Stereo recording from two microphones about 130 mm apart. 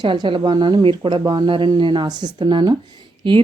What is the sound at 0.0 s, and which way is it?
Speech, 40° right (ahead or behind).